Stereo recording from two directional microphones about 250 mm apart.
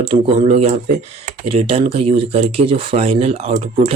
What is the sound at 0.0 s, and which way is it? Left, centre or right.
Speech, right.